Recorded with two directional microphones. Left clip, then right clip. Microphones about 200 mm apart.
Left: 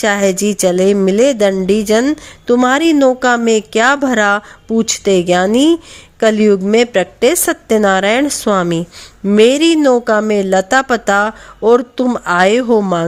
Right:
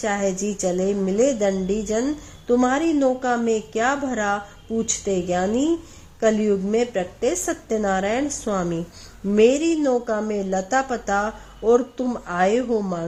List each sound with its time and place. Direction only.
0.0 s a woman's voice: 40° left (ahead or behind)